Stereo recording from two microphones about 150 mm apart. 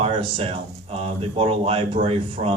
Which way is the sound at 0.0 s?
40° right (ahead or behind).